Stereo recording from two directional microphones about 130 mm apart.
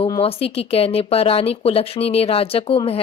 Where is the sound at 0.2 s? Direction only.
50° left (ahead or behind).